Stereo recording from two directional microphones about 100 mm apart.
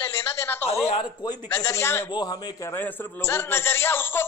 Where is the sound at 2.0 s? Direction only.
40° left (ahead or behind).